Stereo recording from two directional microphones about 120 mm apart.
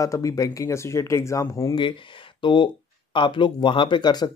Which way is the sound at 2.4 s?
40° left (ahead or behind).